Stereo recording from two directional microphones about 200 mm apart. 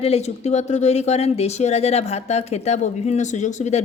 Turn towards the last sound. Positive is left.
turn(degrees=35)  # may be behind; listen again after turning